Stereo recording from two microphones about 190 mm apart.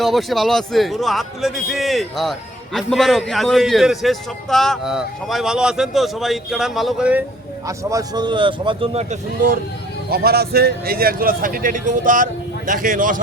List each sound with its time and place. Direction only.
0.0 s a man's voice: centre (ahead or behind)
7.7 s speech: 15° right (ahead or behind); by 9.6 s 40° right (ahead or behind)
10.1 s speech: 55° right (ahead or behind)